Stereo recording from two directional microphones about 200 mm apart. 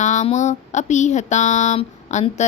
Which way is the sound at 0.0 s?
35° left (ahead or behind).